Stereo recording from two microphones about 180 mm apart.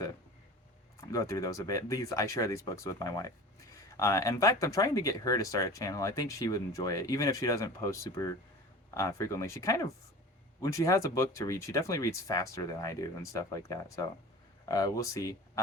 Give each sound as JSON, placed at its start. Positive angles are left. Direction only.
{"t": 1.0, "sound": "speech", "side_deg": 20}